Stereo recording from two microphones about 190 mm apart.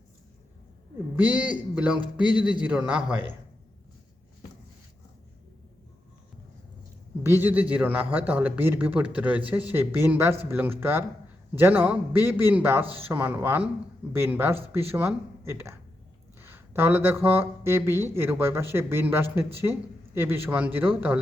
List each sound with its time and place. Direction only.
1.1 s speech: 10° right (ahead or behind)
2.0 s speech: 25° left (ahead or behind)
2.4 s speech: 5° right (ahead or behind)
7.2 s speech: 10° right (ahead or behind)